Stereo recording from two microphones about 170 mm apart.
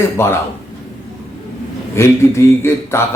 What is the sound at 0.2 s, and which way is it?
Mantra, 15° left (ahead or behind).